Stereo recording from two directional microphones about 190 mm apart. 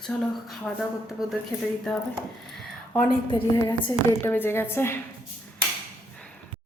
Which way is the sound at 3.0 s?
25° left (ahead or behind).